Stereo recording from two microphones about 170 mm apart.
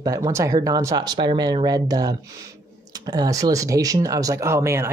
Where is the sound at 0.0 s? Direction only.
20° right (ahead or behind).